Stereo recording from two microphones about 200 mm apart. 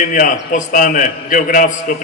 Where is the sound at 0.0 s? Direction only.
40° left (ahead or behind).